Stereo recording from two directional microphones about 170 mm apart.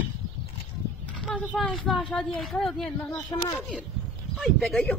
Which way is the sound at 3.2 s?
25° left (ahead or behind).